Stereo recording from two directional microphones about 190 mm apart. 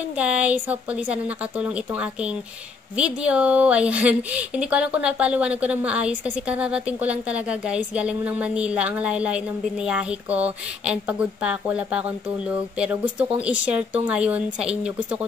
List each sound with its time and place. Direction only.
0.2 s a woman's voice: 5° right (ahead or behind)